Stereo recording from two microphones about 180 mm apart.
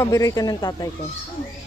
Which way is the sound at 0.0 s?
20° left (ahead or behind).